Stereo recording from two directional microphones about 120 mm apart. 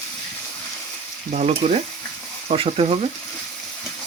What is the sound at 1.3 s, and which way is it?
Frying, 70° right (ahead or behind).